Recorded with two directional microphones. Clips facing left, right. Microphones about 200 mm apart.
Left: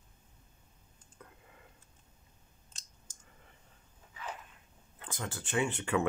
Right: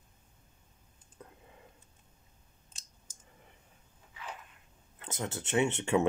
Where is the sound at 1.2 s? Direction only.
25° right (ahead or behind).